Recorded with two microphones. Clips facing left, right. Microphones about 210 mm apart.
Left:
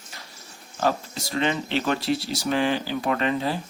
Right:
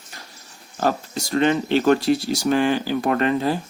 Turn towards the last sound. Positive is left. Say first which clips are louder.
# right 4 dB
turn(degrees=-45)  # may be behind; listen again after turning